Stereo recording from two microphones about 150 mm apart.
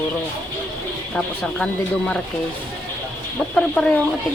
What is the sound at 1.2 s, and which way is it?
Speech, 5° left (ahead or behind).